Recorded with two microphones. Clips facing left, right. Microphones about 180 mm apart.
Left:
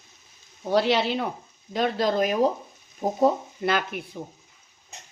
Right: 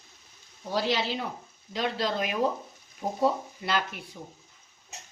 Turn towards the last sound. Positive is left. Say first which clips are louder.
# left 5 dB
turn(degrees=50)  # may be behind; listen again after turning